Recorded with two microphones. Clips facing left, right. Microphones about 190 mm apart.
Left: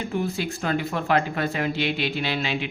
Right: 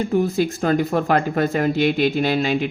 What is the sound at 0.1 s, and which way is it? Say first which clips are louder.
Speech: right 8 dB; 40° right (ahead or behind).